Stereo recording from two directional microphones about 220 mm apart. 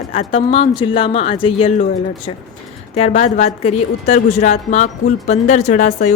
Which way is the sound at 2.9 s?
30° left (ahead or behind).